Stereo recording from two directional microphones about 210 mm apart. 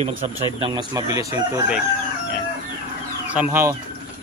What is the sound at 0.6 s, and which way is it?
Speech, 20° right (ahead or behind).